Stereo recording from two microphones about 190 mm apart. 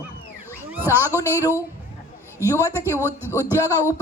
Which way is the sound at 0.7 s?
10° right (ahead or behind).